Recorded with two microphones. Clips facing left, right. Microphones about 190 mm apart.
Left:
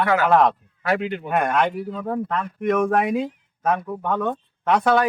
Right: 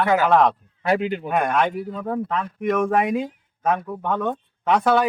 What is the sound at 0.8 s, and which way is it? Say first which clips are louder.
Speech: right 2 dB; 25° right (ahead or behind).